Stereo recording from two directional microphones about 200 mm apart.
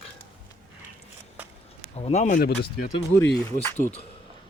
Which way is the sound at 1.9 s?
35° left (ahead or behind).